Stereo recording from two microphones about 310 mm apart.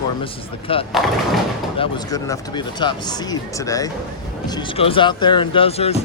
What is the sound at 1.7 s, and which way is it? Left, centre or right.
Speech, centre.